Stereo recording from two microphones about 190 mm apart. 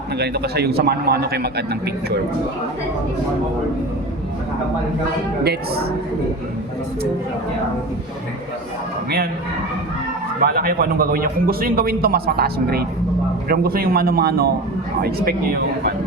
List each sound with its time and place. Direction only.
0.2 s a man's voice: 60° right (ahead or behind)
5.4 s a man's voice: 55° right (ahead or behind)
10.4 s a man's voice: 50° right (ahead or behind)